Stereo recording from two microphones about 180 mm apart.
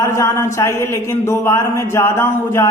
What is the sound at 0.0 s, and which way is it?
Speech, 15° left (ahead or behind).